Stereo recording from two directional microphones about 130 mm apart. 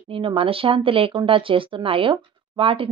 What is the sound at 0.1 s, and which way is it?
Speech, 45° right (ahead or behind).